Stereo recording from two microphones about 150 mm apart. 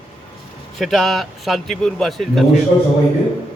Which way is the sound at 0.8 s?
Centre (ahead or behind).